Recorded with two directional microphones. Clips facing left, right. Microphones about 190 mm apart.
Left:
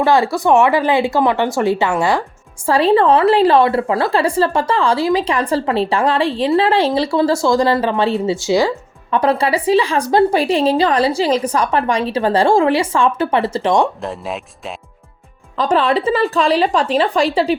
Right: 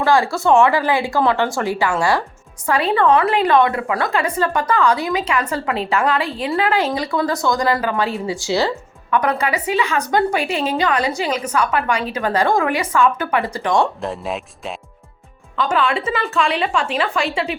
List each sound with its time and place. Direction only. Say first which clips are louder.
0.0 s speech: left 2 dB; 20° left (ahead or behind)
2.6 s a woman's voice: left 4 dB; 30° left (ahead or behind); by 8.7 s 15° left (ahead or behind)
9.0 s a woman's voice: left 3 dB; 30° left (ahead or behind)
14.0 s speech: even; centre (ahead or behind)
15.5 s a woman's voice: left 4 dB; 35° left (ahead or behind)